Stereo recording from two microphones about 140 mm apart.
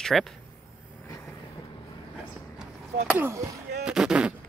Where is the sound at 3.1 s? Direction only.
20° right (ahead or behind).